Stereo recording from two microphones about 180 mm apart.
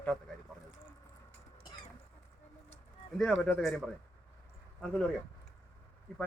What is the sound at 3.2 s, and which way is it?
Speech, 5° left (ahead or behind).